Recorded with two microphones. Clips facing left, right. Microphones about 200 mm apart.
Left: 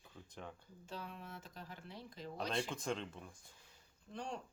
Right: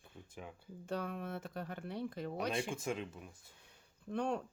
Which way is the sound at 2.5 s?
10° right (ahead or behind).